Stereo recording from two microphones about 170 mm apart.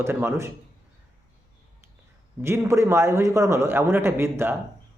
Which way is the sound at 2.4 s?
15° right (ahead or behind).